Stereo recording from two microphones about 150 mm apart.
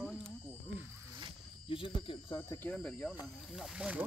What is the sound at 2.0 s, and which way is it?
Speech, 30° left (ahead or behind).